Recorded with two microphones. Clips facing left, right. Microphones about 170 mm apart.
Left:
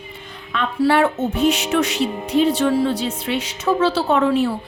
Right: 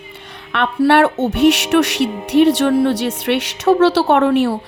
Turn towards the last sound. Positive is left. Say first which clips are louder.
# right 4 dB
turn(degrees=-70)  # may be behind; listen again after turning